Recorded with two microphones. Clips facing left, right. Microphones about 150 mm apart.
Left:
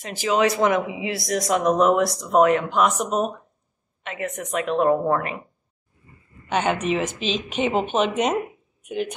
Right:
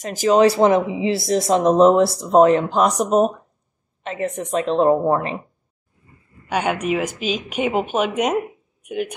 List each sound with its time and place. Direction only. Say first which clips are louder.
0.0 s a woman's voice: right 6 dB; 40° right (ahead or behind); by 5.4 s 25° right (ahead or behind)
6.5 s speech: right 1 dB; 10° right (ahead or behind)